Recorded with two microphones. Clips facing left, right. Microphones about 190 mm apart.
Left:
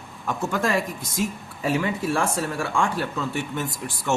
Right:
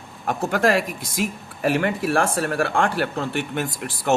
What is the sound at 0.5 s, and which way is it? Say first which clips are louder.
Speech: right 5 dB; 75° right (ahead or behind).